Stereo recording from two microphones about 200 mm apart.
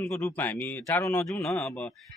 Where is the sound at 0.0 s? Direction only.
10° left (ahead or behind).